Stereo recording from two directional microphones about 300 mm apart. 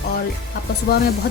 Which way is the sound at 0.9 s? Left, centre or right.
Left.